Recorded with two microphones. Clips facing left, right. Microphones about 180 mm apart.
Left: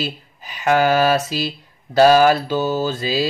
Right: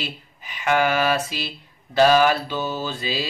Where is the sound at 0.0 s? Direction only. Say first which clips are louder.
Left 6 dB; 40° left (ahead or behind).